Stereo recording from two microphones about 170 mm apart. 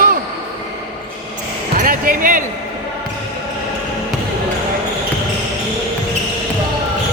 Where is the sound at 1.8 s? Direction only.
55° right (ahead or behind).